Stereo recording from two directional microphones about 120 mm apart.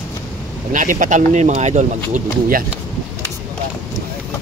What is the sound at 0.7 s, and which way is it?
Speech, 90° right.